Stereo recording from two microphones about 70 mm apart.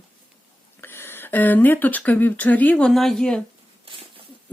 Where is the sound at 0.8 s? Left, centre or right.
Left.